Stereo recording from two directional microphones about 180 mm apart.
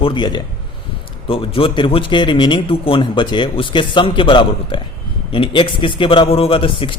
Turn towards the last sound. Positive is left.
turn(degrees=30)  # may be behind; listen again after turning